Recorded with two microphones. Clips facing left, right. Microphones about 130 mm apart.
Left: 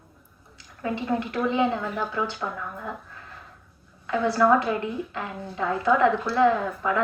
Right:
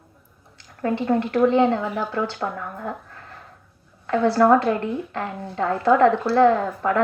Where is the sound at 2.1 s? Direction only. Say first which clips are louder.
Right 3 dB; 50° right (ahead or behind).